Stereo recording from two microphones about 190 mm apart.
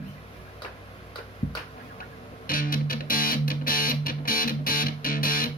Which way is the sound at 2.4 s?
50° left (ahead or behind).